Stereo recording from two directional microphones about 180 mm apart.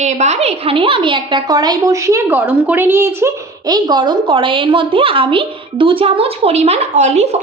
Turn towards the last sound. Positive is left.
turn(degrees=-40)  # may be behind; listen again after turning